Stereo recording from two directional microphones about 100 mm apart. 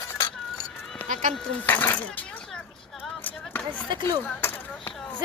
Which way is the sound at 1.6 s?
20° left (ahead or behind).